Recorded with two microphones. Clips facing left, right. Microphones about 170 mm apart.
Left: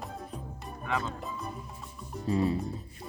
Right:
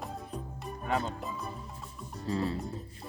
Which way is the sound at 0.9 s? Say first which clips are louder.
Right 1 dB; 40° right (ahead or behind).